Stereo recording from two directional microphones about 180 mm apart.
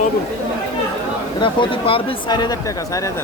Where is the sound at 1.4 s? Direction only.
30° left (ahead or behind).